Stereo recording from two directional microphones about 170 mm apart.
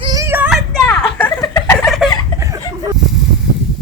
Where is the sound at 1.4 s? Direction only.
15° left (ahead or behind).